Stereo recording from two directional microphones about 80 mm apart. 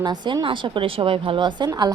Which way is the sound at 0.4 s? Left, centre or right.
Right.